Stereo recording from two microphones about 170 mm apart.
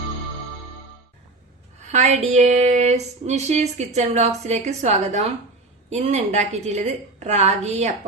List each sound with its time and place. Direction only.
1.9 s speech: 45° right (ahead or behind)